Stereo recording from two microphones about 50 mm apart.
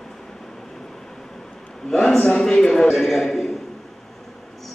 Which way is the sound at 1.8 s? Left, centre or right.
Centre.